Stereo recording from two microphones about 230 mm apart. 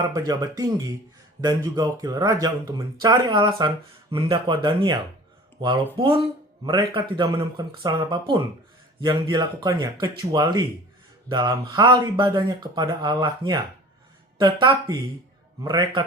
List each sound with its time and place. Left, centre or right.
0.1 s speech: centre